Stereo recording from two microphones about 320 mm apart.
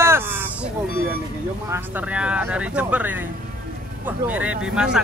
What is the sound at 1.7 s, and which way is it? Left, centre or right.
Speech, centre.